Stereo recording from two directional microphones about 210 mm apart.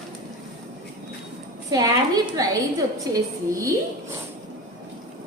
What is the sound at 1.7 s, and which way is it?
Speech, 15° right (ahead or behind).